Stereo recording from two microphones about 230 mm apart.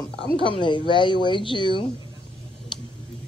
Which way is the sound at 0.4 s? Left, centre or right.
Left.